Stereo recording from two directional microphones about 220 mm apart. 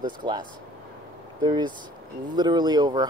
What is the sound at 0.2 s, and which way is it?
Speech, 20° right (ahead or behind).